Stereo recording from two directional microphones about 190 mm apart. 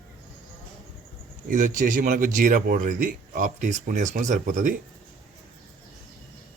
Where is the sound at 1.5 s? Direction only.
45° right (ahead or behind).